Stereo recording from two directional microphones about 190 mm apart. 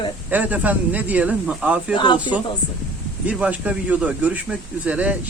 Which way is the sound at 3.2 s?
5° right (ahead or behind).